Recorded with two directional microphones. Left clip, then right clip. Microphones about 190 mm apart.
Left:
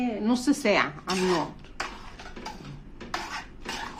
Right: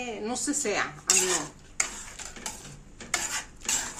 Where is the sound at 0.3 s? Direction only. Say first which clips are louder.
Left 6 dB; 50° left (ahead or behind).